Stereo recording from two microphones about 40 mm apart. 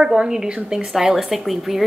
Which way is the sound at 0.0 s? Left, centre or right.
Centre.